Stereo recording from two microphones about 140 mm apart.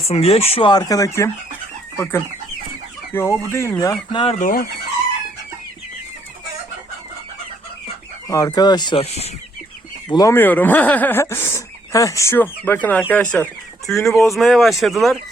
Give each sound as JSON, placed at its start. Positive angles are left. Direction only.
{"t": 0.1, "sound": "speech", "side_deg": 45}
{"t": 0.7, "sound": "speech", "side_deg": 25}
{"t": 4.1, "sound": "speech", "side_deg": 40}
{"t": 4.4, "sound": "speech", "side_deg": 75}
{"t": 8.3, "sound": "speech", "side_deg": 25}
{"t": 9.0, "sound": "speech", "side_deg": 50}
{"t": 10.1, "sound": "speech", "side_deg": 25}
{"t": 10.3, "sound": "speech", "side_deg": 15}